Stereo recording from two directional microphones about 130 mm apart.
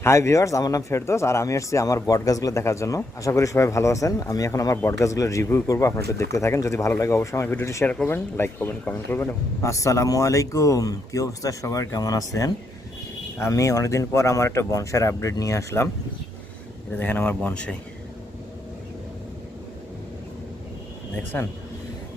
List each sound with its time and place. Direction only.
0.0 s speech: 20° left (ahead or behind)
16.9 s speech: 15° left (ahead or behind)
21.3 s speech: 15° left (ahead or behind)